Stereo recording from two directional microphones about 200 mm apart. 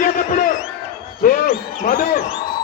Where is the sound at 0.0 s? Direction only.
40° left (ahead or behind).